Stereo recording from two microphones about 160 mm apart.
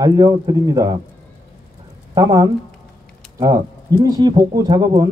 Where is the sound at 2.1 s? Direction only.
20° right (ahead or behind).